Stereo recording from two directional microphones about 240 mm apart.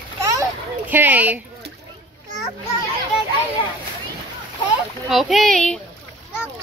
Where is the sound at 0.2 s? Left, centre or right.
Centre.